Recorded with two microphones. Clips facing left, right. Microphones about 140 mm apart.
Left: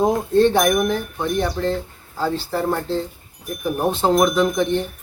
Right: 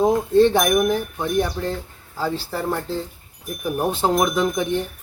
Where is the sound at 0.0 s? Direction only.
Centre (ahead or behind).